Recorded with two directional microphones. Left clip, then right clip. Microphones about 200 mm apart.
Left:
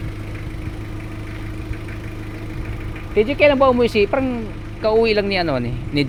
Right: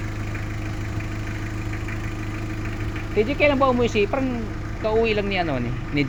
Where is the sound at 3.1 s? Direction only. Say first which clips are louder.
Left 5 dB; 40° left (ahead or behind).